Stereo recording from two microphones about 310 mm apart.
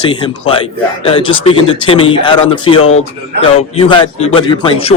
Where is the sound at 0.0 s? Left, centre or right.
Centre.